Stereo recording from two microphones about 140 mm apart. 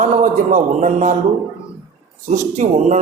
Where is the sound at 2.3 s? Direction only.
60° right (ahead or behind).